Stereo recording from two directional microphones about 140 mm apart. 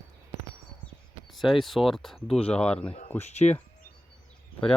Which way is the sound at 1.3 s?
Centre (ahead or behind).